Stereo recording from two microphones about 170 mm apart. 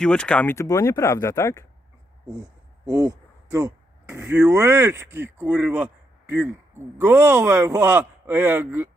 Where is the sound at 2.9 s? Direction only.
20° right (ahead or behind).